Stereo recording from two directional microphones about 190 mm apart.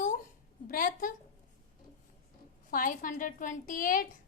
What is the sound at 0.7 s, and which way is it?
Speech, 45° left (ahead or behind).